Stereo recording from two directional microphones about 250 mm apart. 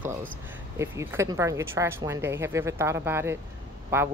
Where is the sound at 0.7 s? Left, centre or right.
Centre.